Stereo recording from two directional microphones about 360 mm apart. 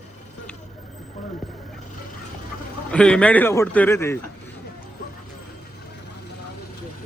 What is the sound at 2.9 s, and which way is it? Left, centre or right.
Speech, centre.